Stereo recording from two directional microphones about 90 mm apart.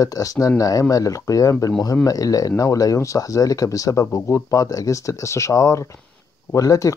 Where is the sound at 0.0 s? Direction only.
40° left (ahead or behind).